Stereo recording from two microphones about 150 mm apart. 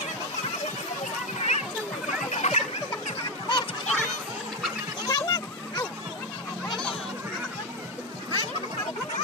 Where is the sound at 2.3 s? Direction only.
45° left (ahead or behind).